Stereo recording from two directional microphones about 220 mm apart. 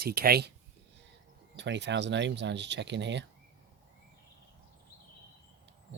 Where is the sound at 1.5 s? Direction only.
55° right (ahead or behind).